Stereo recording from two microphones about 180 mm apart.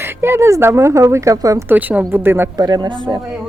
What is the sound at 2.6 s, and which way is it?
Speech, 25° right (ahead or behind).